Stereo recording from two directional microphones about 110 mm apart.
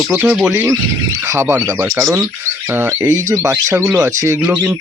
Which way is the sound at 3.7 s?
10° right (ahead or behind).